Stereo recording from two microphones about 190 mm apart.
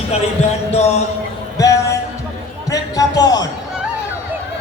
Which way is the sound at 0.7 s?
35° left (ahead or behind).